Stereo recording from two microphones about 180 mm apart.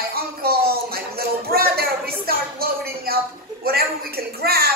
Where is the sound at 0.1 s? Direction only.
60° right (ahead or behind).